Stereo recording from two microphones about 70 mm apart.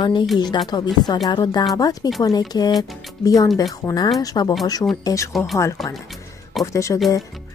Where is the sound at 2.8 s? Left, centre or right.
Left.